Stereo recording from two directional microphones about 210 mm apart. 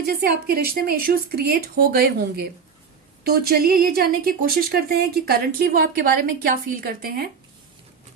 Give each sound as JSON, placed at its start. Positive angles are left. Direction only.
{"t": 0.1, "sound": "a woman's voice", "side_deg": -45}